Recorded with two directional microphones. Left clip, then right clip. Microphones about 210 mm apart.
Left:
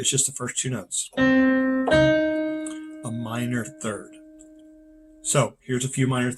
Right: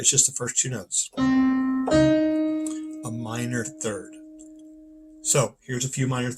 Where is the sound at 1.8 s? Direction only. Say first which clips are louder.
Even; 35° left (ahead or behind).